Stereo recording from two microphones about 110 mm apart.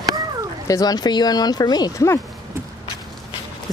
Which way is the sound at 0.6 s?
35° left (ahead or behind).